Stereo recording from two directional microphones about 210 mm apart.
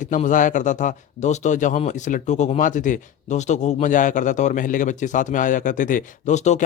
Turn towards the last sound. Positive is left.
turn(degrees=35)  # may be behind; listen again after turning